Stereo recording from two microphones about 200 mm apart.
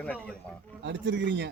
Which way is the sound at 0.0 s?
5° left (ahead or behind).